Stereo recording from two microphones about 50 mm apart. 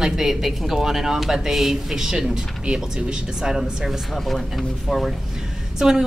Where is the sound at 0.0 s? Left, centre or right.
Centre.